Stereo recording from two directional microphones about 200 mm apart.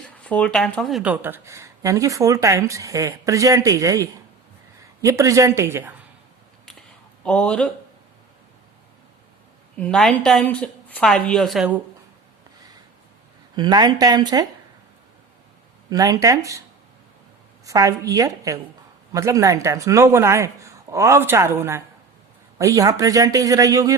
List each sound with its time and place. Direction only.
0.2 s speech: 5° left (ahead or behind); by 5.9 s 10° right (ahead or behind)
7.3 s a woman's voice: 5° left (ahead or behind)
9.7 s a woman's voice: 5° left (ahead or behind)
13.6 s speech: 20° right (ahead or behind)
15.9 s speech: 20° right (ahead or behind)
17.7 s speech: 15° right (ahead or behind)